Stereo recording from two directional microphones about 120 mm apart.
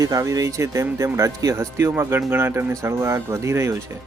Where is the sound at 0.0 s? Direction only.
30° right (ahead or behind).